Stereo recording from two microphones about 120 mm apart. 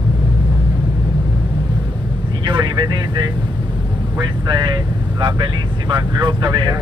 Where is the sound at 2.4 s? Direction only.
40° right (ahead or behind).